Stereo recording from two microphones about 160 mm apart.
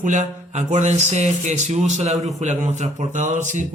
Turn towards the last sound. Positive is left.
turn(degrees=-50)  # may be behind; listen again after turning